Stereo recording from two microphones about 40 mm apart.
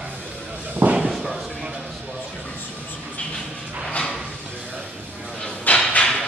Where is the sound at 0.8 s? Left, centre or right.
Right.